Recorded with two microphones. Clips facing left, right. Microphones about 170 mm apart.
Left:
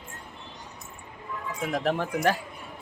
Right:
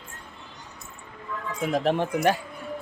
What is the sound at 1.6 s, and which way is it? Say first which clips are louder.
Speech: right 3 dB; 25° right (ahead or behind).